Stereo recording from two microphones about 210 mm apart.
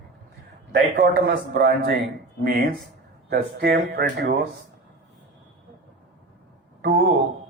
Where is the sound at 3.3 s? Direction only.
50° right (ahead or behind).